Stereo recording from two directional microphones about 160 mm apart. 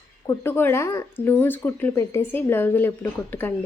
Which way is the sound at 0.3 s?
15° left (ahead or behind).